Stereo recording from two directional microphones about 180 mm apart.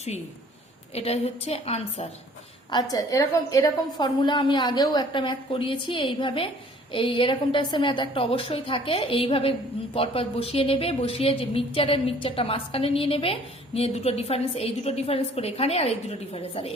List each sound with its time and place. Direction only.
0.9 s a woman's voice: 35° left (ahead or behind)
2.6 s a woman's voice: 25° left (ahead or behind)